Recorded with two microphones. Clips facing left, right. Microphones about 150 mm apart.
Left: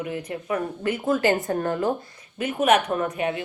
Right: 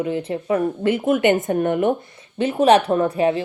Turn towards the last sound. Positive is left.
turn(degrees=-30)  # may be behind; listen again after turning